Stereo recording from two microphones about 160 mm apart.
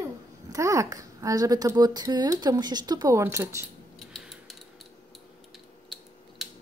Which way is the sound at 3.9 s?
Centre (ahead or behind).